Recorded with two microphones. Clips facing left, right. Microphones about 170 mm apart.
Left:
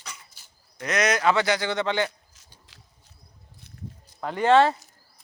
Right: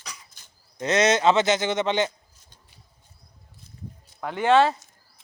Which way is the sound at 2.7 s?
90° left.